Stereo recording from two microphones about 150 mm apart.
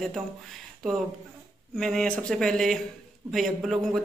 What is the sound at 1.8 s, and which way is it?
Speech, 5° left (ahead or behind).